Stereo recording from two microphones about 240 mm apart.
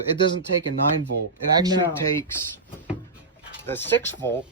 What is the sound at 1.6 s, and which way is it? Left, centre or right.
Speech, centre.